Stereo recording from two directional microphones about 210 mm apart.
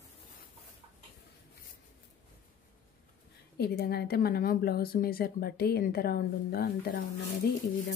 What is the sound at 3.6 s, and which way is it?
A woman's voice, 50° left (ahead or behind).